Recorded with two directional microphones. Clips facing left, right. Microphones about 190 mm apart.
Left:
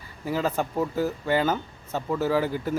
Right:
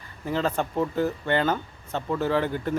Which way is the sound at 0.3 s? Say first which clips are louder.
Even; 5° left (ahead or behind).